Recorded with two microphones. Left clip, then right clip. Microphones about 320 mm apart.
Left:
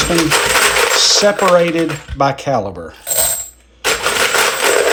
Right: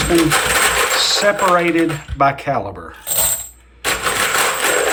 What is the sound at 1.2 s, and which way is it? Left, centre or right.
Speech, centre.